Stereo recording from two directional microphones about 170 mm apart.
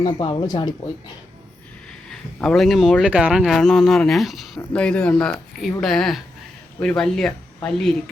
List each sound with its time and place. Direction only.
0.0 s speech: 25° left (ahead or behind)
2.0 s speech: 5° left (ahead or behind)